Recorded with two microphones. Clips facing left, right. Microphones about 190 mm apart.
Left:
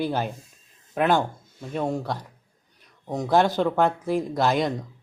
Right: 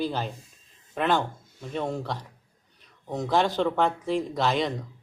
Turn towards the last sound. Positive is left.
turn(degrees=5)  # may be behind; listen again after turning